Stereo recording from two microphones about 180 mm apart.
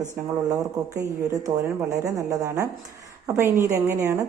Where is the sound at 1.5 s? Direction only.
20° right (ahead or behind).